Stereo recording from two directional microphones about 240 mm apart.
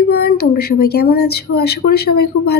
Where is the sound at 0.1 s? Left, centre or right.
Left.